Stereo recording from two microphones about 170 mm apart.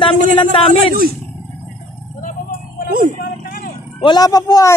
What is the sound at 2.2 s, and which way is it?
Vehicle, 60° left (ahead or behind).